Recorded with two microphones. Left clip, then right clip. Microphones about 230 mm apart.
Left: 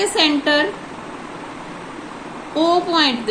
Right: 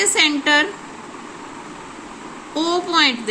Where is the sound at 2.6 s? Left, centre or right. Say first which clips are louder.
Left 4 dB; right.